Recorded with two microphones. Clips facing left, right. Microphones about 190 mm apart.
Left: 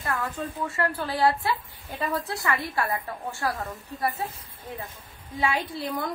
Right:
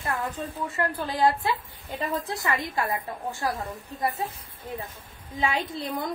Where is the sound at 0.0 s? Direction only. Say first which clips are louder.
Even; 20° right (ahead or behind).